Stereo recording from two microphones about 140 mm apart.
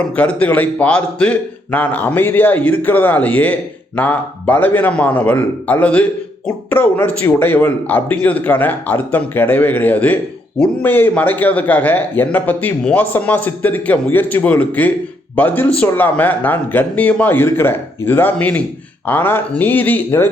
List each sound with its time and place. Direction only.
0.2 s a man's voice: 10° left (ahead or behind)